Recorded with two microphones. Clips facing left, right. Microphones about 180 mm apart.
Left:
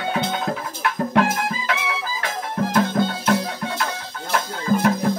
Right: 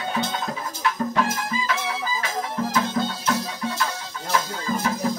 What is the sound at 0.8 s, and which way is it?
Music, 60° left (ahead or behind).